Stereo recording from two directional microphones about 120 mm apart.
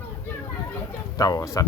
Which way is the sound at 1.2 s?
30° left (ahead or behind).